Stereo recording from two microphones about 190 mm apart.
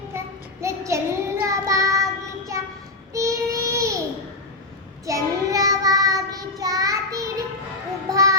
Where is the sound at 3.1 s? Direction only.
15° right (ahead or behind).